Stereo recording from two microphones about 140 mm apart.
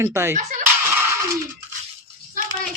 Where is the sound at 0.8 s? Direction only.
20° right (ahead or behind).